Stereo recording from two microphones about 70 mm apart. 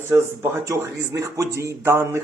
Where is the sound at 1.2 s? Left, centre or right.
Right.